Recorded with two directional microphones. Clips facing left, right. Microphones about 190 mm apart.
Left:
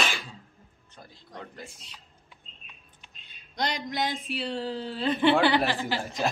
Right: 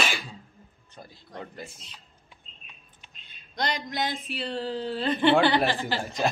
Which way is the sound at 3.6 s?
10° left (ahead or behind).